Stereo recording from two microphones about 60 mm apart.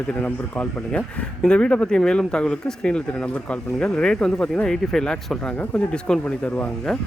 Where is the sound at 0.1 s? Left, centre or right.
Left.